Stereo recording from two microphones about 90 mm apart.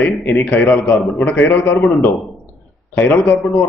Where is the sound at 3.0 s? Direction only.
20° left (ahead or behind).